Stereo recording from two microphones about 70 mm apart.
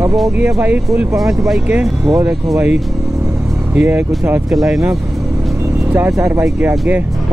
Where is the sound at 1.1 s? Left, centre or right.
Right.